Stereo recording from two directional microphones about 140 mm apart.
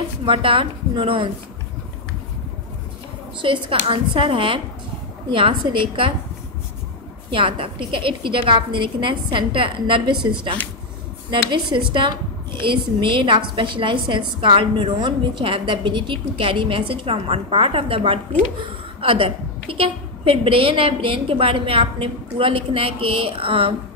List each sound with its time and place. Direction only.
0.2 s a woman's voice: 40° right (ahead or behind)
3.4 s a woman's voice: 35° right (ahead or behind)
7.2 s a woman's voice: 40° right (ahead or behind)